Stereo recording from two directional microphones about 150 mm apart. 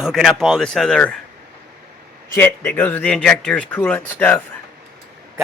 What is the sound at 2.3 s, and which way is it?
Speech, 15° left (ahead or behind).